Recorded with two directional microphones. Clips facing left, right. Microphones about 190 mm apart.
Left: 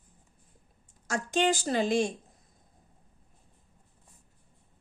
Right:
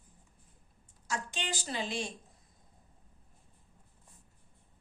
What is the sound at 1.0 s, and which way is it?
Speech, 45° left (ahead or behind).